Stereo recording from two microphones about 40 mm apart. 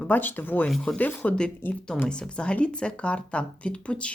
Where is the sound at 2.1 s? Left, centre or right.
Left.